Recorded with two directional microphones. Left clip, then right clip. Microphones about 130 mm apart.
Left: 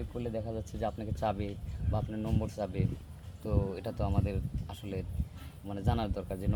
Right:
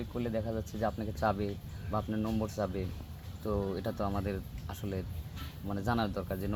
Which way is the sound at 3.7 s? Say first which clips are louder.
Right 2 dB; 20° left (ahead or behind).